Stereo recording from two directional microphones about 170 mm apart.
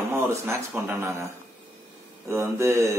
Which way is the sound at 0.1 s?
15° right (ahead or behind).